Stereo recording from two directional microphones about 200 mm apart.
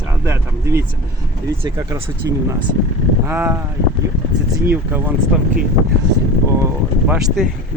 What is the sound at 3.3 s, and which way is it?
Speech, 10° right (ahead or behind).